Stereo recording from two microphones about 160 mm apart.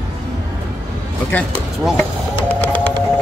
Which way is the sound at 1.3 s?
10° left (ahead or behind).